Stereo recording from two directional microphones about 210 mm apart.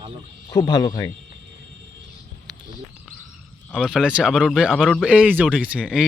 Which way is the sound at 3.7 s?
5° left (ahead or behind).